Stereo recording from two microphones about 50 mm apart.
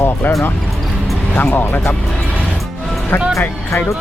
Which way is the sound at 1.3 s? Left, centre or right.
Left.